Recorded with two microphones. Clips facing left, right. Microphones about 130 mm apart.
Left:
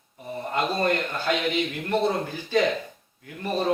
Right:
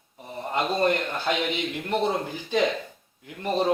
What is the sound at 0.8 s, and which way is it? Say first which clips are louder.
A man's voice: right 1 dB; 20° right (ahead or behind).